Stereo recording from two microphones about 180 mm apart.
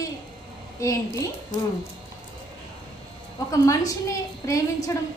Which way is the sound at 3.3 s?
20° left (ahead or behind).